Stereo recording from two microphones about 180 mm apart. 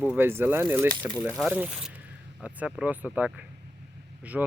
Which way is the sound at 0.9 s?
20° right (ahead or behind).